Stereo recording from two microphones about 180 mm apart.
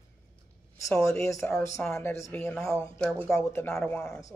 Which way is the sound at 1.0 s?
15° left (ahead or behind).